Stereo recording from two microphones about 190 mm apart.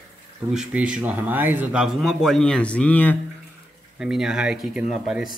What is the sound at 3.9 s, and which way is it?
Speech, 5° right (ahead or behind).